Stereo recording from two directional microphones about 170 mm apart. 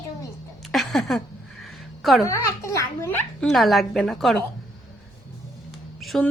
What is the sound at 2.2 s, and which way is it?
A child's voice, 20° left (ahead or behind).